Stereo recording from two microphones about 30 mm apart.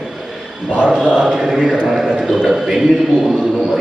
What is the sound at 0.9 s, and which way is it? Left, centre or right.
Speech, right.